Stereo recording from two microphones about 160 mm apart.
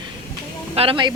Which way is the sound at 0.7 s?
35° right (ahead or behind).